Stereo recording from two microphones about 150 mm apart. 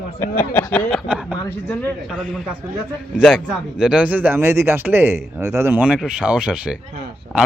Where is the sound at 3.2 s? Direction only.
5° right (ahead or behind).